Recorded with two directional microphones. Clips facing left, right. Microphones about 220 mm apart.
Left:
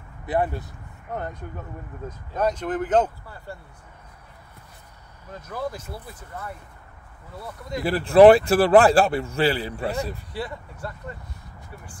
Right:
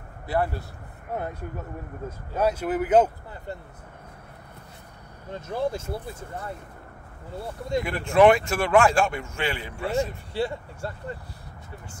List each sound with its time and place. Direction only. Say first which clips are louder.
0.3 s speech: left 2 dB; 20° left (ahead or behind)
1.1 s speech: right 1 dB; 10° right (ahead or behind)
5.3 s speech: right 4 dB; 25° right (ahead or behind)
7.8 s a man's voice: left 6 dB; 35° left (ahead or behind)
10.3 s speech: right 4 dB; 30° right (ahead or behind)